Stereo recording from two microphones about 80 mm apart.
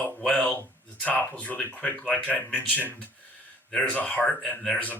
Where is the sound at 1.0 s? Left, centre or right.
Centre.